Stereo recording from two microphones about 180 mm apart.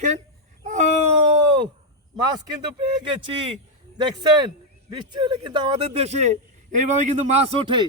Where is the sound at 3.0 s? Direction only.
25° right (ahead or behind).